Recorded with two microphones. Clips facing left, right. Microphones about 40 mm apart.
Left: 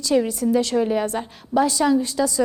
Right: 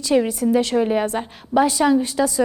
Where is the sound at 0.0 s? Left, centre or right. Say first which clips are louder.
Right 2 dB; right.